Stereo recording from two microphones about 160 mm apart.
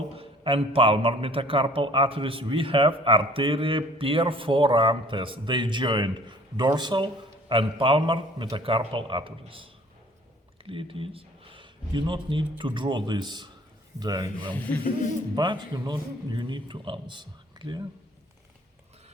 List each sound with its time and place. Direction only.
0.2 s a man's voice: 35° right (ahead or behind)
10.7 s a man's voice: 35° right (ahead or behind)
14.5 s speech: 10° left (ahead or behind)
15.4 s a man's voice: 25° right (ahead or behind)